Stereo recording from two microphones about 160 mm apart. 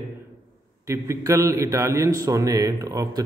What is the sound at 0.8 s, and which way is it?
Speech, 20° right (ahead or behind).